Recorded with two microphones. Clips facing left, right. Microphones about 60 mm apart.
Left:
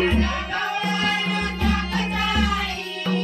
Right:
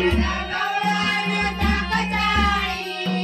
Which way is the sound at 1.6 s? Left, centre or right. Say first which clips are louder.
Right 1 dB; right.